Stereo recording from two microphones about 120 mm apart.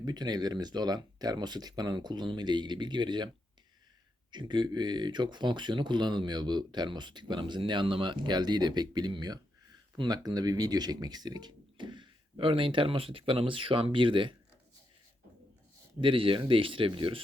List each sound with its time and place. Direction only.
0.0 s speech: 35° right (ahead or behind)
4.3 s speech: 40° right (ahead or behind)
16.0 s speech: 45° right (ahead or behind)